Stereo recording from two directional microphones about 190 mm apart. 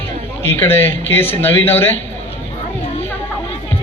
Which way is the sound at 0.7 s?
10° left (ahead or behind).